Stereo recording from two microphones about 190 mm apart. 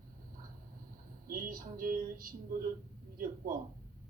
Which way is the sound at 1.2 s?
45° right (ahead or behind).